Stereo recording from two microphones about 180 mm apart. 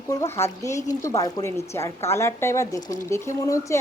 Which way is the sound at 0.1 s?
15° left (ahead or behind).